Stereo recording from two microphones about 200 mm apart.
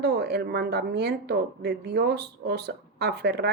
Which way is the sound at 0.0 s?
55° right (ahead or behind).